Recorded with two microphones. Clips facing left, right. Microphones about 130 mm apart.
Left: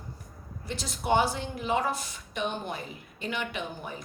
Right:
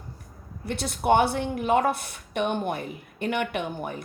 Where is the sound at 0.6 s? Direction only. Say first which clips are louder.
Right 7 dB; 60° right (ahead or behind).